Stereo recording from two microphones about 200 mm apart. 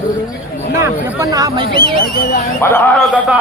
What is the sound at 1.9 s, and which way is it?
Speech, 40° left (ahead or behind).